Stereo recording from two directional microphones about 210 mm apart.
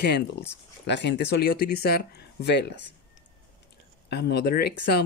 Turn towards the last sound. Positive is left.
turn(degrees=50)  # may be behind; listen again after turning